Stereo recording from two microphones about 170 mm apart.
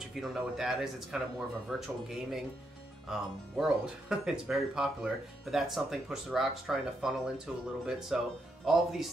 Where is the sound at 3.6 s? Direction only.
5° right (ahead or behind).